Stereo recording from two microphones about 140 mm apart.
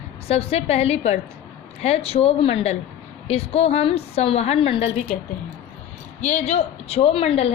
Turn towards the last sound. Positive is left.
turn(degrees=45)  # may be behind; listen again after turning